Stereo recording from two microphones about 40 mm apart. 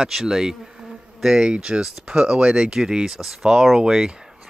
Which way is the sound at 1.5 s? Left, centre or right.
Right.